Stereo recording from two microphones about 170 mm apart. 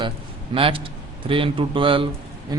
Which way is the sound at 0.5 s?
30° right (ahead or behind).